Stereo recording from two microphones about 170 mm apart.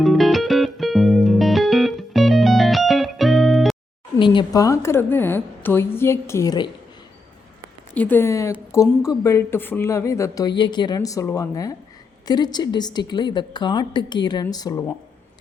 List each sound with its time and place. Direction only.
0.0 s music: centre (ahead or behind)
4.2 s a woman's voice: 25° left (ahead or behind)
7.9 s a woman's voice: 10° left (ahead or behind)